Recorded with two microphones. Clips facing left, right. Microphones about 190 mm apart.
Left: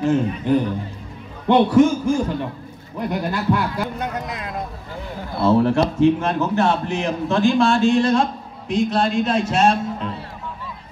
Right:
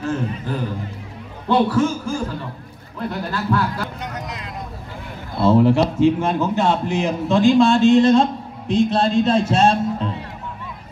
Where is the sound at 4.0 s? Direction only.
55° left (ahead or behind).